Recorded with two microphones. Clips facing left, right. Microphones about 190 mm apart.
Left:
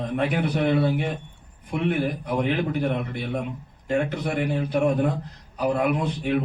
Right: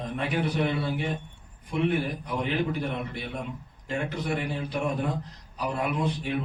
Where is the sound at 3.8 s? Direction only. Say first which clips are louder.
Left 6 dB; 55° left (ahead or behind).